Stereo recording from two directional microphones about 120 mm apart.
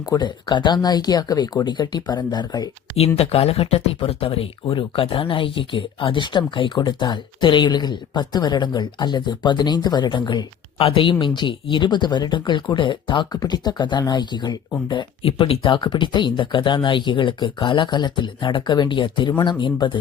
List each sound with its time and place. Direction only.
0.0 s speech: 35° left (ahead or behind)
3.2 s speech: 55° left (ahead or behind)